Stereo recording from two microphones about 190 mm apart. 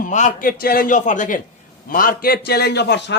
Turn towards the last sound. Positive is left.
turn(degrees=60)  # may be behind; listen again after turning